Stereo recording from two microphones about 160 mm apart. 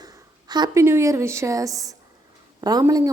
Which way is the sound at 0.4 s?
25° right (ahead or behind).